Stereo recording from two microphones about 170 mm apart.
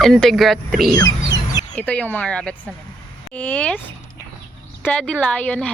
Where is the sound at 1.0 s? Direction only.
20° left (ahead or behind).